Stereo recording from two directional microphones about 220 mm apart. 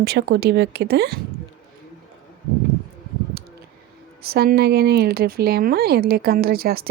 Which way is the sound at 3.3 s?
45° right (ahead or behind).